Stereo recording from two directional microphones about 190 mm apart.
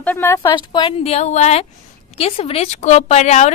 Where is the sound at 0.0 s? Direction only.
10° left (ahead or behind).